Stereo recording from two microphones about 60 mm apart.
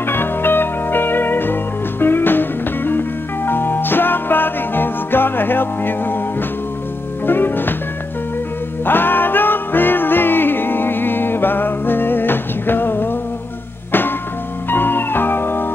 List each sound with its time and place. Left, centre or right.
0.0 s music: left
7.2 s music: left
8.8 s music: left
14.7 s music: left